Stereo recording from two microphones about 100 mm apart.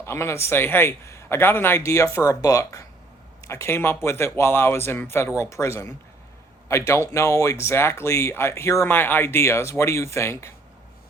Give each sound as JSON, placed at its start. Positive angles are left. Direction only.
{"t": 0.0, "sound": "speech", "side_deg": 25}